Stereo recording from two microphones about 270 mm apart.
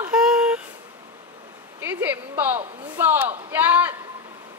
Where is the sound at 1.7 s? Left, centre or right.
Centre.